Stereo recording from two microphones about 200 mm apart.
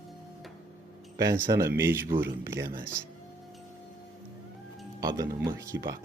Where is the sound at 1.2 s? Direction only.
15° right (ahead or behind).